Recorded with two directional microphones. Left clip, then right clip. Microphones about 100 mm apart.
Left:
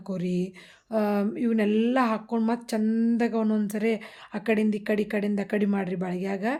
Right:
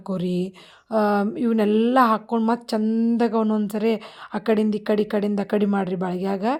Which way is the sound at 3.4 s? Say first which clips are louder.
Right 4 dB; 25° right (ahead or behind).